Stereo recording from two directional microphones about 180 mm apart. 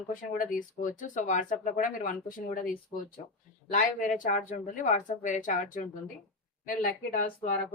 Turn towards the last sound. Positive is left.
turn(degrees=50)  # may be behind; listen again after turning